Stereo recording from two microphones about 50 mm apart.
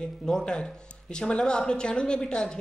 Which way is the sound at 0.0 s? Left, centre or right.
Centre.